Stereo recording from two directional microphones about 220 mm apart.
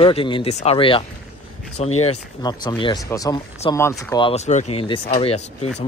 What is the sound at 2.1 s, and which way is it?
Speech, 20° left (ahead or behind).